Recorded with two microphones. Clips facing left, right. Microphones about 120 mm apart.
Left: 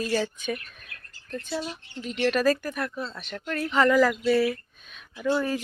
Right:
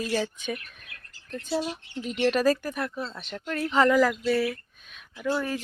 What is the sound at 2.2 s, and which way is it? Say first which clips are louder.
Speech: even; 15° right (ahead or behind).